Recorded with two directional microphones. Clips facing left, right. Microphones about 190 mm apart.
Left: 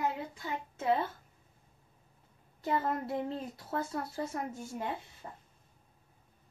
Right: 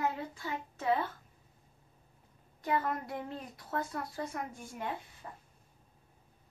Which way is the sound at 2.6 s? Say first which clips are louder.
Left 1 dB; 25° left (ahead or behind).